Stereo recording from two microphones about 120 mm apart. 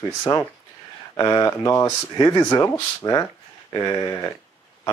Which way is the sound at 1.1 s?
30° left (ahead or behind).